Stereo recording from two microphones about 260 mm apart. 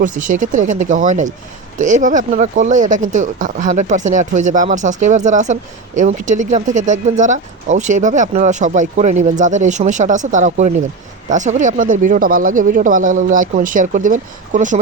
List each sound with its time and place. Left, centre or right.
0.0 s speech: right